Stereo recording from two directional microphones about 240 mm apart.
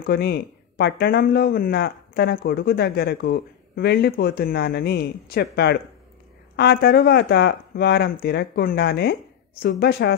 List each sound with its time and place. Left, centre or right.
0.0 s speech: left